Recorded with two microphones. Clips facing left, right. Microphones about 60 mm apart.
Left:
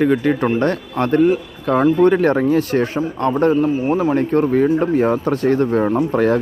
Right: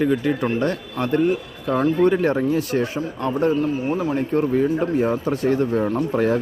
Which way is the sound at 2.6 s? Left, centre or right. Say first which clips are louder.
Left 4 dB; left.